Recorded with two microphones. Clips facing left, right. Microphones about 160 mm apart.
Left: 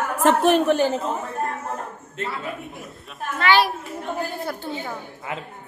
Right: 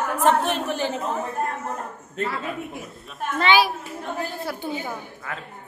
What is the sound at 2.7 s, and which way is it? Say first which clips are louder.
Speech: right 2 dB; centre (ahead or behind).